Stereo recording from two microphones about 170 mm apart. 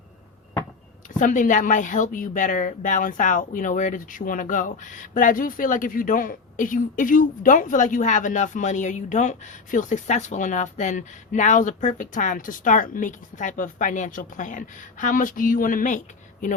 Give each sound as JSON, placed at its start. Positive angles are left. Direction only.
{"t": 1.2, "sound": "a woman's voice", "side_deg": 50}